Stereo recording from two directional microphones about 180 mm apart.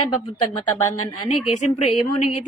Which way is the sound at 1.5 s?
40° left (ahead or behind).